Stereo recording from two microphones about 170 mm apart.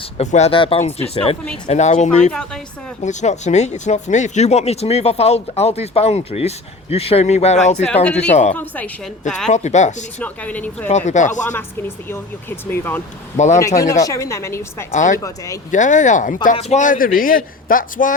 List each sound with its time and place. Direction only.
0.2 s speech: 40° left (ahead or behind)
8.5 s speech: 10° left (ahead or behind)
9.5 s speech: 45° left (ahead or behind)
10.2 s speech: 10° left (ahead or behind)
10.8 s speech: 45° left (ahead or behind)
11.4 s speech: 10° left (ahead or behind)
13.3 s speech: 45° left (ahead or behind)
13.6 s speech: 20° left (ahead or behind)
14.9 s speech: 45° left (ahead or behind)